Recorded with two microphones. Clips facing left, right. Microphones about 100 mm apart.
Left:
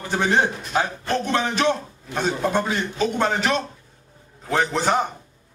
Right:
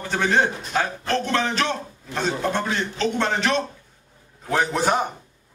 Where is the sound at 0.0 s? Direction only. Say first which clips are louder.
Even; 15° left (ahead or behind); by 5.1 s 10° right (ahead or behind).